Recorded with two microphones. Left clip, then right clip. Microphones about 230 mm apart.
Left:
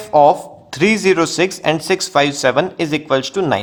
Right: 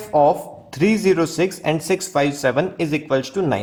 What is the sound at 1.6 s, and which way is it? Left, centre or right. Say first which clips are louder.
Speech: left 4 dB; left.